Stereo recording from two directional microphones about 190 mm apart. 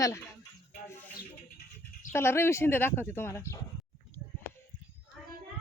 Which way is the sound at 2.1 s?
15° left (ahead or behind).